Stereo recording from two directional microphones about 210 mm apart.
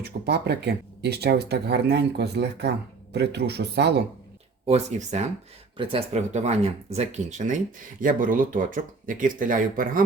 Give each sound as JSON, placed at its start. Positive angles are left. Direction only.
{"t": 0.0, "sound": "speech", "side_deg": -50}
{"t": 4.6, "sound": "speech", "side_deg": -30}